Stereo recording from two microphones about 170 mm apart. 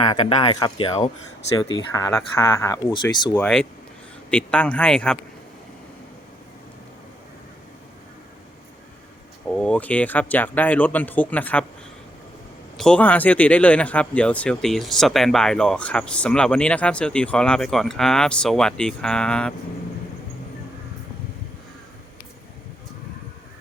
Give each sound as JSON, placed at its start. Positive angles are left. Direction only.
{"t": 0.5, "sound": "speech", "side_deg": 20}
{"t": 3.3, "sound": "speech", "side_deg": 5}
{"t": 9.6, "sound": "speech", "side_deg": 5}
{"t": 12.7, "sound": "speech", "side_deg": 5}